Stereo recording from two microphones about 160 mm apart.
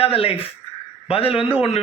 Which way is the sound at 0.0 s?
35° left (ahead or behind).